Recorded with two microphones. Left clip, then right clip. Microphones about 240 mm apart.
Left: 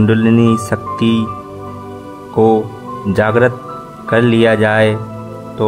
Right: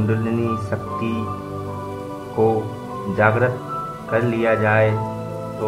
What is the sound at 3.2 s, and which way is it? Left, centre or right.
Speech, left.